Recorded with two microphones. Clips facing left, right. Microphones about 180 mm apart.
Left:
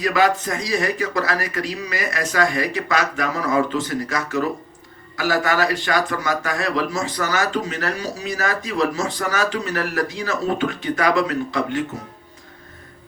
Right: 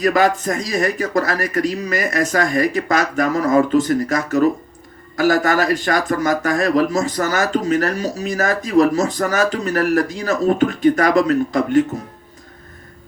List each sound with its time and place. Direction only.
0.0 s speech: 45° right (ahead or behind)